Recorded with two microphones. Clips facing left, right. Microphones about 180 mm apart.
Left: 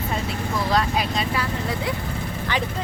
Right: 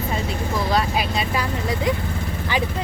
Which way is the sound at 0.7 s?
5° right (ahead or behind).